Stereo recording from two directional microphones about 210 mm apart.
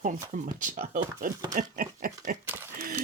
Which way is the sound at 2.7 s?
45° right (ahead or behind).